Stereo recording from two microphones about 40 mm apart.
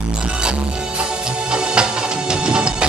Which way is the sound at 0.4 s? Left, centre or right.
Right.